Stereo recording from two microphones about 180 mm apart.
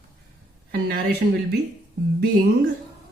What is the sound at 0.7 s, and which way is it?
Speech, 55° right (ahead or behind).